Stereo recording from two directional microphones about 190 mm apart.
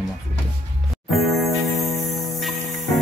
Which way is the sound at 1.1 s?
Centre (ahead or behind).